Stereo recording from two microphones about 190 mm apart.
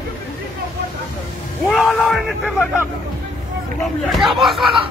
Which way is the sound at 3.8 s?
Centre (ahead or behind).